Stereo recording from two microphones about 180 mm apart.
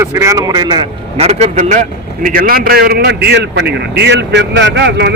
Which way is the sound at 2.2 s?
50° right (ahead or behind).